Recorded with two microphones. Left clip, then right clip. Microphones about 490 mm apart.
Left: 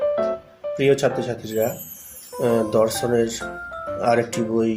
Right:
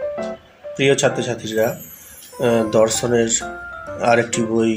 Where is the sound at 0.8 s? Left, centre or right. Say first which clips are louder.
Right 3 dB; left.